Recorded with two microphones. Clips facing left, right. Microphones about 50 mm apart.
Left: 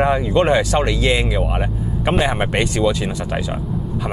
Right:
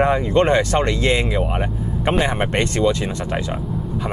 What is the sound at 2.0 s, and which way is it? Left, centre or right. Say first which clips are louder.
Speech: left 1 dB; centre.